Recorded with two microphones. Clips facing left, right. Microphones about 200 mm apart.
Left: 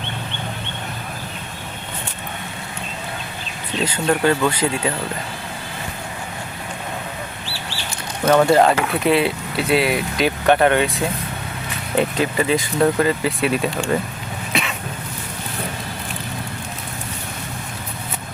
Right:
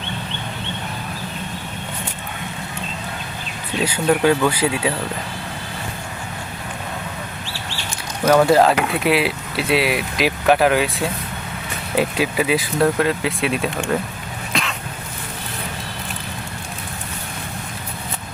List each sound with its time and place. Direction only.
3.8 s speech: 10° right (ahead or behind)
8.3 s speech: centre (ahead or behind)
14.5 s cough: 5° left (ahead or behind)